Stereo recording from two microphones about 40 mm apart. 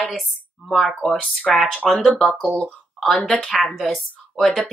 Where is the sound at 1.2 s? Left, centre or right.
Left.